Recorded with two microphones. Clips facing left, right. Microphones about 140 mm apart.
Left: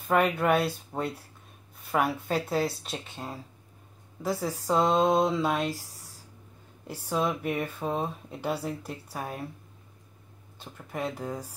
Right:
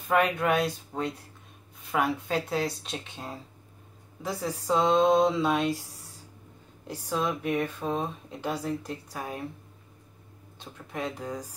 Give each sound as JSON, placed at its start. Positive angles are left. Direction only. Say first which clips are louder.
{"t": 0.1, "sound": "speech", "louder": "left 1 dB", "side_deg": 5}
{"t": 7.1, "sound": "speech", "louder": "even", "side_deg": 10}
{"t": 10.6, "sound": "speech", "louder": "left 1 dB", "side_deg": 5}